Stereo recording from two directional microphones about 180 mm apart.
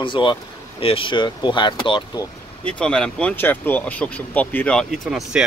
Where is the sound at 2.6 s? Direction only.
5° left (ahead or behind).